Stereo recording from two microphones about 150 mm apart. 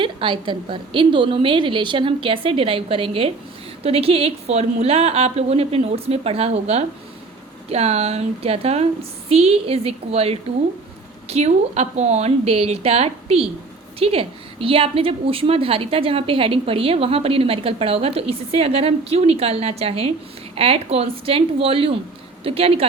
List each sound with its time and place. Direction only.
0.0 s a woman's voice: 35° right (ahead or behind)